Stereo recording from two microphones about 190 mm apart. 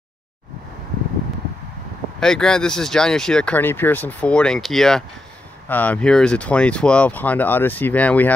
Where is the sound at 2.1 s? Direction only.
5° left (ahead or behind).